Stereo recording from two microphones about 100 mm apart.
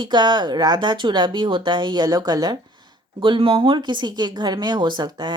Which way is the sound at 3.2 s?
60° right (ahead or behind).